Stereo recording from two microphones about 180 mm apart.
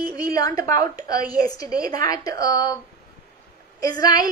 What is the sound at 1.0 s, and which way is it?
A woman's voice, 20° left (ahead or behind).